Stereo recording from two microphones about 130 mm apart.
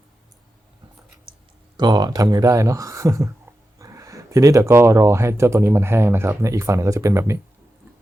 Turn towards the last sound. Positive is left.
turn(degrees=-20)  # may be behind; listen again after turning